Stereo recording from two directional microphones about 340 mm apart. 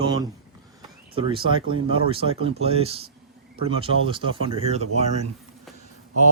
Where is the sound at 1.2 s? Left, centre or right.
Centre.